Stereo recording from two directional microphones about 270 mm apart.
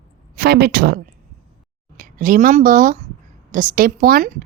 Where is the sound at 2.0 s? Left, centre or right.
Right.